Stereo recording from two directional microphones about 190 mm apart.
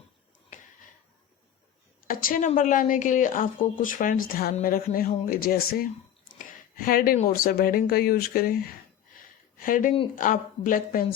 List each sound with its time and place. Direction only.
2.0 s a woman's voice: 45° left (ahead or behind)
6.4 s a sound: 45° left (ahead or behind)
7.2 s a woman's voice: 50° left (ahead or behind)